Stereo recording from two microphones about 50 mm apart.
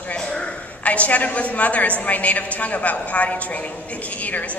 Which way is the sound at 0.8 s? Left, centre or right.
Left.